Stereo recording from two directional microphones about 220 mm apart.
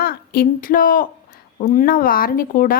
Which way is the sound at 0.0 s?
40° left (ahead or behind).